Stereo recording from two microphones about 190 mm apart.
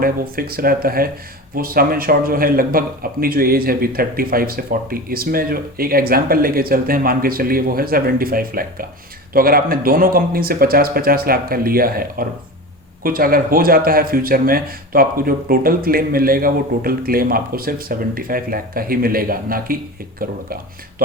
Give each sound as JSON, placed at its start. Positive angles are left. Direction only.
{"t": 0.0, "sound": "speech", "side_deg": -50}